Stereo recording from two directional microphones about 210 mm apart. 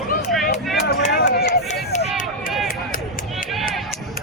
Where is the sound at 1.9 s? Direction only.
35° left (ahead or behind).